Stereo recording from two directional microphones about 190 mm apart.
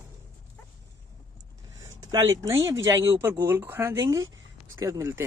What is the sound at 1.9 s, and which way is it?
Speech, 15° right (ahead or behind).